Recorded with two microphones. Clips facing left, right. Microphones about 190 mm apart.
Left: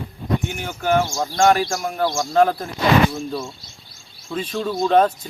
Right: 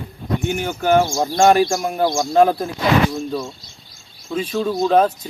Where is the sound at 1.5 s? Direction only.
15° right (ahead or behind).